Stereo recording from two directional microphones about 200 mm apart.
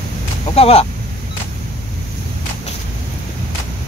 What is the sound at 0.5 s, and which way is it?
Speech, 30° left (ahead or behind).